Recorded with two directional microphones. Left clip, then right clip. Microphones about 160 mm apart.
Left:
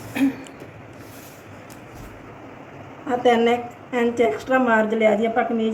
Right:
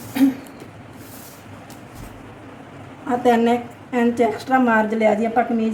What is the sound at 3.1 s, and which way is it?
A woman's voice, 40° right (ahead or behind).